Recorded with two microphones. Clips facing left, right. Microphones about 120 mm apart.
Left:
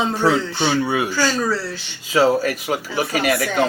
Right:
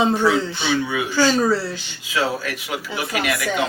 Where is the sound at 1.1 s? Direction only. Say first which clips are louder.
Right 3 dB; 20° right (ahead or behind).